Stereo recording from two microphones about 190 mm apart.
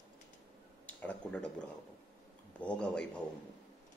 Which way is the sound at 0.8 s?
5° left (ahead or behind).